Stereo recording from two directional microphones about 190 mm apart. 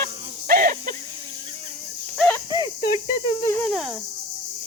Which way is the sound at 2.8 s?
25° left (ahead or behind).